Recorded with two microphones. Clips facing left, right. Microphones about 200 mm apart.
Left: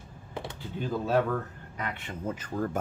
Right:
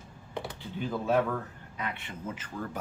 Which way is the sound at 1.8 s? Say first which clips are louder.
Left 2 dB; 40° left (ahead or behind).